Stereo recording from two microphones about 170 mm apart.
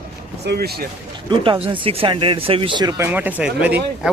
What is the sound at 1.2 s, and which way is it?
Speech, 30° right (ahead or behind).